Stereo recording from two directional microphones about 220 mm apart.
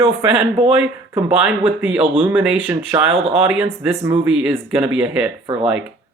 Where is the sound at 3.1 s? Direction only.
25° right (ahead or behind).